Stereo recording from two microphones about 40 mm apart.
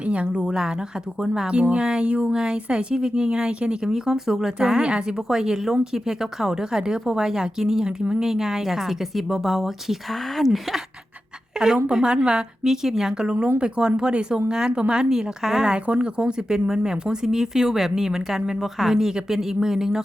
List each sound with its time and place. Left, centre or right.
0.0 s a woman's voice: right
1.7 s speech: right; by 4.5 s centre
4.6 s speech: right; by 10.8 s centre
11.6 s speech: centre
13.6 s speech: right